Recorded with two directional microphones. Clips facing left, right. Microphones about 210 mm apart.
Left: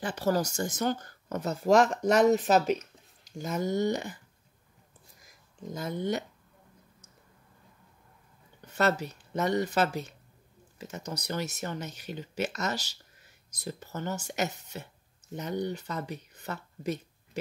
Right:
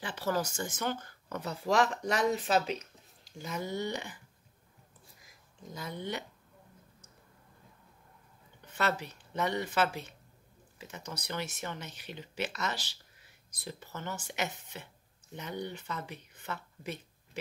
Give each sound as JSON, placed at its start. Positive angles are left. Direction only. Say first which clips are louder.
{"t": 0.0, "sound": "speech", "louder": "left 5 dB", "side_deg": 45}
{"t": 5.8, "sound": "speech", "louder": "left 7 dB", "side_deg": 45}
{"t": 8.7, "sound": "speech", "louder": "left 5 dB", "side_deg": 40}